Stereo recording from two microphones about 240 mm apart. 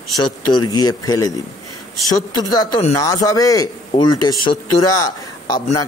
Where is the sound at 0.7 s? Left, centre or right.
Centre.